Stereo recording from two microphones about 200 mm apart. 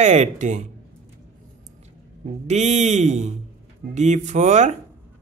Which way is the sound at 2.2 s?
35° right (ahead or behind).